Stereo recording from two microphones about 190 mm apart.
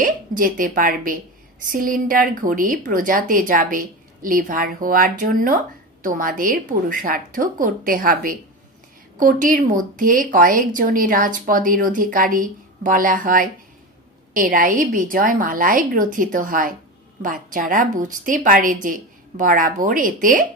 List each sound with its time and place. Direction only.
0.0 s a woman's voice: 45° right (ahead or behind)